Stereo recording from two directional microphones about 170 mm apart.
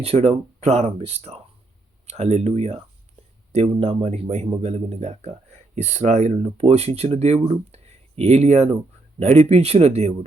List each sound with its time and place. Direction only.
0.0 s speech: 35° right (ahead or behind)